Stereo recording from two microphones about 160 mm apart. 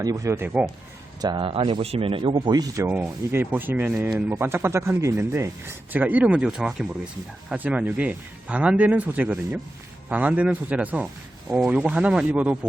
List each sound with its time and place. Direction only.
0.0 s speech: 20° right (ahead or behind)
1.2 s speech: 30° right (ahead or behind); by 12.5 s 10° right (ahead or behind)